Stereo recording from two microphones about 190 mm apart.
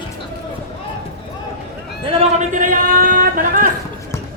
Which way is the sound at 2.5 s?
45° right (ahead or behind).